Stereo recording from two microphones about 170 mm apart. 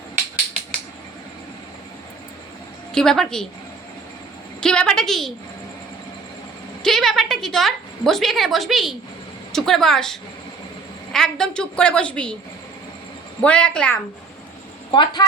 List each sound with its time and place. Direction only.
2.9 s a woman's voice: 5° left (ahead or behind)
4.6 s a woman's voice: 5° left (ahead or behind)
6.8 s a woman's voice: centre (ahead or behind)
13.4 s a woman's voice: 5° left (ahead or behind)
14.9 s speech: 25° left (ahead or behind)